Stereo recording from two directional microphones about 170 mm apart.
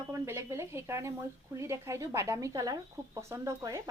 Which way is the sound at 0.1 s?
15° right (ahead or behind).